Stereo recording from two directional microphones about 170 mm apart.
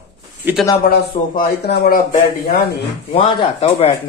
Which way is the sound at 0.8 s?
65° left (ahead or behind).